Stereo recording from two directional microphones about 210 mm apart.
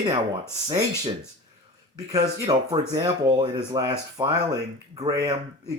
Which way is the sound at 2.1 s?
20° right (ahead or behind).